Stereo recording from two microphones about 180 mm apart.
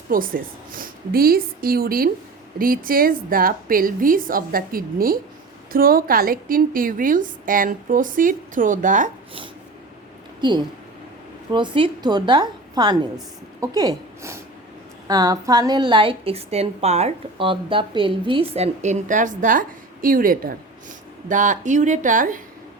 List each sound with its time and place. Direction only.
0.1 s a woman's voice: 50° right (ahead or behind)
10.4 s a woman's voice: 25° right (ahead or behind); by 22.4 s 45° right (ahead or behind)